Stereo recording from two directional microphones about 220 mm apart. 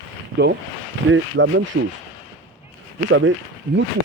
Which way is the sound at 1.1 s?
60° right (ahead or behind).